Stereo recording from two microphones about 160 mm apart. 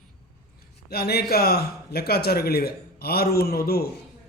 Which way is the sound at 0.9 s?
75° left (ahead or behind).